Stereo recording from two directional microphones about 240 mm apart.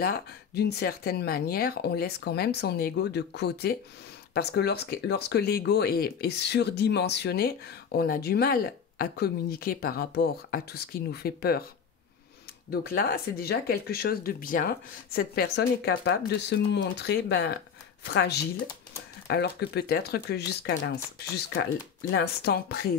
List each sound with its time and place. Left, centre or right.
0.0 s speech: left
12.8 s speech: left
22.1 s speech: left